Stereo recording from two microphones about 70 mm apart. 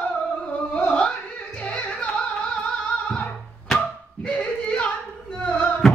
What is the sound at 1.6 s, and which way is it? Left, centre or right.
Music, centre.